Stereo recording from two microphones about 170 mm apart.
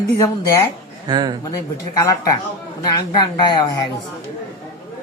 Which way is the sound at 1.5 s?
20° left (ahead or behind).